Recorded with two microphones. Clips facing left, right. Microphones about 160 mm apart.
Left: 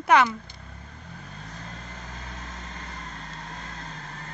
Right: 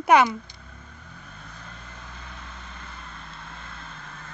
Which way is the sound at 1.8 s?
40° left (ahead or behind).